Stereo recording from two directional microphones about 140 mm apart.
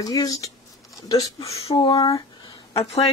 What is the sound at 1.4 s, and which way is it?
Speech, 45° left (ahead or behind).